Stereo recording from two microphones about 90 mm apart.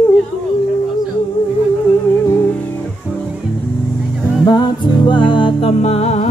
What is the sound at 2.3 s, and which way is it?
Music, 30° left (ahead or behind).